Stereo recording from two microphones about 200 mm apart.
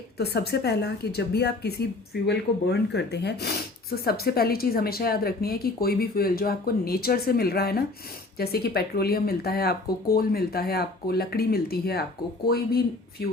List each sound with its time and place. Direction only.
0.2 s speech: 55° left (ahead or behind)